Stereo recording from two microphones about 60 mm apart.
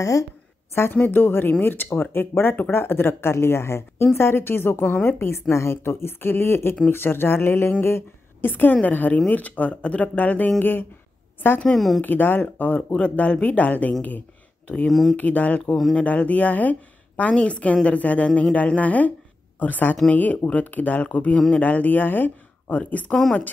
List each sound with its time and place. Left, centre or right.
1.0 s a woman's voice: left
14.9 s speech: centre
15.1 s speech: left
15.6 s speech: centre
16.0 s speech: left